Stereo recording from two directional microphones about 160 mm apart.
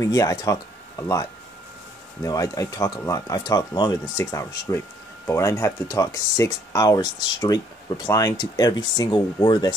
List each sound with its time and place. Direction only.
0.0 s speech: 20° left (ahead or behind)